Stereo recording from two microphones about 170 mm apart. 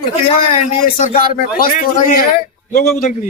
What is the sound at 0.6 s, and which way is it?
A man's voice, 50° left (ahead or behind).